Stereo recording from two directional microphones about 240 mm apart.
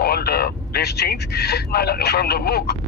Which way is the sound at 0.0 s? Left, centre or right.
Left.